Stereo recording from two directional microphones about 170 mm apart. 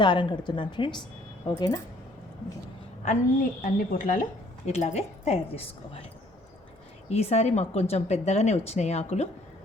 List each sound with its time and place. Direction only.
0.0 s a woman's voice: 30° left (ahead or behind)
3.0 s a woman's voice: 45° left (ahead or behind)
7.1 s speech: 35° left (ahead or behind)